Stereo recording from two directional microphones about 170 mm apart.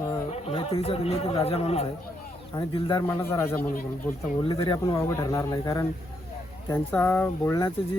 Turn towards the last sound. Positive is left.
turn(degrees=15)  # may be behind; listen again after turning